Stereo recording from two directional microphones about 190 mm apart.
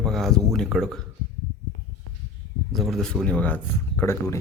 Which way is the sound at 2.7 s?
Centre (ahead or behind).